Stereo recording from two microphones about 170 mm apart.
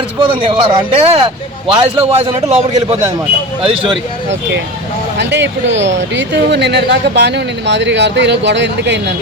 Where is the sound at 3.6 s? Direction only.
30° right (ahead or behind).